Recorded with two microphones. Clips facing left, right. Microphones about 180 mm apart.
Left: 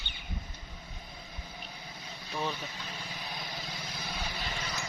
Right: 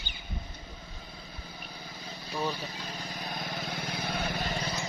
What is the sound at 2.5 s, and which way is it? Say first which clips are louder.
Vehicle: right 3 dB; 35° right (ahead or behind).